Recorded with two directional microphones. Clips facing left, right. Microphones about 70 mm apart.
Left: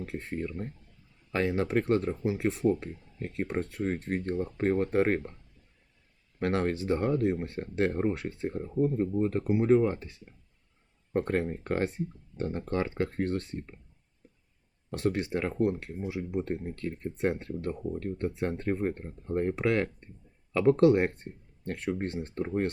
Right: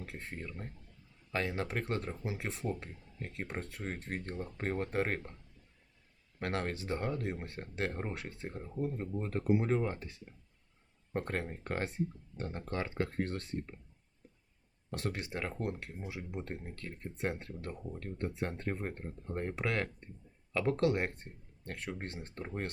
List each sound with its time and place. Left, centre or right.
1.3 s speech: left
6.4 s speech: left
11.1 s speech: left
14.9 s speech: left